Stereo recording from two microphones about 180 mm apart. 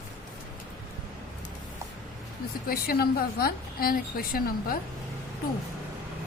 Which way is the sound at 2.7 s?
55° left (ahead or behind).